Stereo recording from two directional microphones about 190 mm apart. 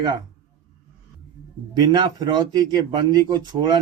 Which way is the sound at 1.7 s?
25° right (ahead or behind).